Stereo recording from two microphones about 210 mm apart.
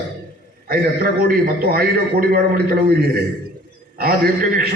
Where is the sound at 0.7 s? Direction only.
45° right (ahead or behind).